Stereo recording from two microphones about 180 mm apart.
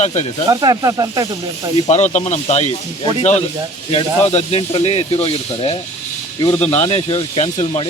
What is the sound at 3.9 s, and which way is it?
Speech, 30° left (ahead or behind).